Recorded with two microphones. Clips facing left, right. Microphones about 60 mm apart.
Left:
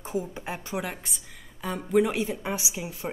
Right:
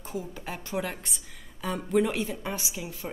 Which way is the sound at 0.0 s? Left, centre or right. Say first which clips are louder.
Left 4 dB; left.